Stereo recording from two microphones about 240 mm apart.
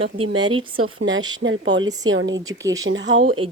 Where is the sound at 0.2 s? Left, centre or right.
Centre.